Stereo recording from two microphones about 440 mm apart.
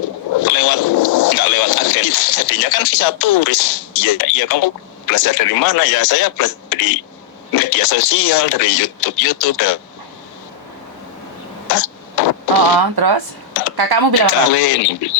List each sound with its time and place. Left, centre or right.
0.0 s speech: left
11.7 s throat clearing: left
12.8 s speech: right
14.4 s speech: left